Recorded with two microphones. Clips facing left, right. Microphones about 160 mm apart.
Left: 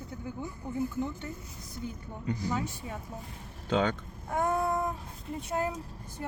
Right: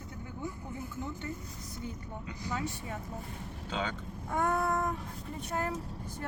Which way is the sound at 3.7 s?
45° left (ahead or behind).